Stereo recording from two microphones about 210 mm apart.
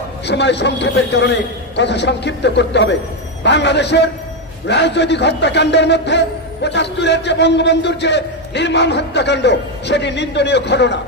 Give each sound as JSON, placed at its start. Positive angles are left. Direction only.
{"t": 0.2, "sound": "a man's voice", "side_deg": 55}